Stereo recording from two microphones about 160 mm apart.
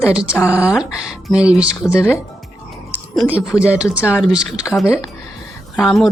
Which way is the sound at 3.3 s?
10° right (ahead or behind).